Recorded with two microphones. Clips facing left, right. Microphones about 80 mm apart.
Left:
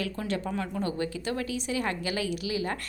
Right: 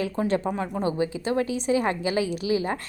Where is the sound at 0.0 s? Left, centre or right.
Right.